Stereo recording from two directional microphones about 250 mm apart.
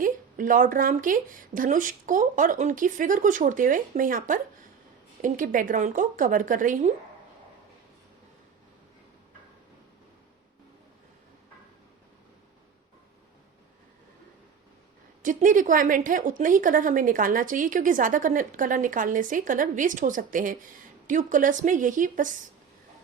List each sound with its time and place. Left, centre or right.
0.0 s speech: right
15.2 s speech: right